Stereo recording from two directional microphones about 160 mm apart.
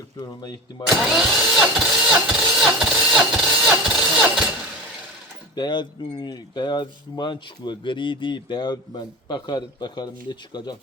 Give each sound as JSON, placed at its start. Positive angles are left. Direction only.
{"t": 0.3, "sound": "speech", "side_deg": 25}
{"t": 0.9, "sound": "speech", "side_deg": 0}
{"t": 2.6, "sound": "engine starting", "side_deg": -5}
{"t": 5.5, "sound": "speech", "side_deg": 30}